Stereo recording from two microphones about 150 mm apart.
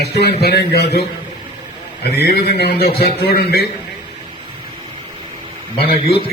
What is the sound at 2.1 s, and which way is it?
A man's voice, 90° left.